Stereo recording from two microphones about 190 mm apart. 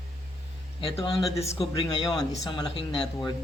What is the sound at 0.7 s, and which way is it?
Speech, 30° left (ahead or behind).